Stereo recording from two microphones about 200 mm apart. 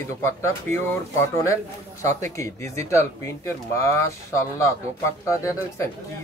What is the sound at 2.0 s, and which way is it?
Speech, 35° right (ahead or behind).